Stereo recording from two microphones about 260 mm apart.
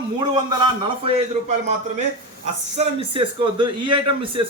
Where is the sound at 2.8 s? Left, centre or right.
Centre.